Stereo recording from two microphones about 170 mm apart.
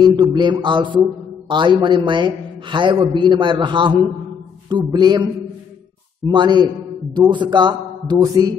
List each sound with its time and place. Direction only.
0.0 s a man's voice: 25° right (ahead or behind)
6.3 s a man's voice: 25° right (ahead or behind)